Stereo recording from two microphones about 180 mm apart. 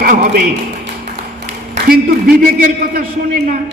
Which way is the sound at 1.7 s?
55° right (ahead or behind).